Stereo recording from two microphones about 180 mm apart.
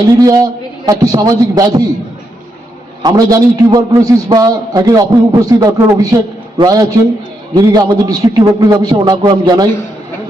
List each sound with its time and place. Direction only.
0.2 s a man's voice: 20° right (ahead or behind)
3.0 s a man's voice: 20° right (ahead or behind)